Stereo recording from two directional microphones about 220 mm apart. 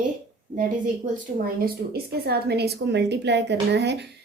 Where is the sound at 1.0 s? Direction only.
35° right (ahead or behind).